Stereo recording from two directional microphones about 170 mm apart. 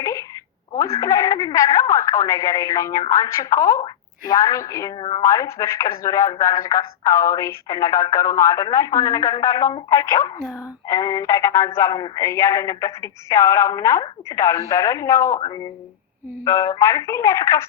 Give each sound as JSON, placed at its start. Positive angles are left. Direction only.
{"t": 0.0, "sound": "a sound", "side_deg": 20}
{"t": 0.8, "sound": "speech", "side_deg": 20}
{"t": 4.9, "sound": "a woman's voice", "side_deg": 30}
{"t": 5.2, "sound": "speech", "side_deg": 20}